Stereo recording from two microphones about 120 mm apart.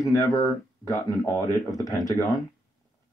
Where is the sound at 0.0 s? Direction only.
25° left (ahead or behind).